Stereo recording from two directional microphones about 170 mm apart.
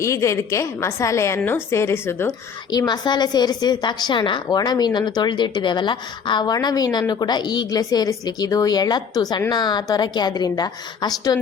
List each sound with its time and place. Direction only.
0.0 s a woman's voice: 15° left (ahead or behind)
2.6 s a woman's voice: 25° left (ahead or behind)